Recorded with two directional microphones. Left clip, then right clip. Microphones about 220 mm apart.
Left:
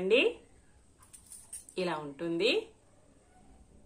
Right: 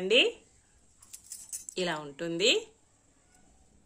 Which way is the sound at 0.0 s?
35° right (ahead or behind).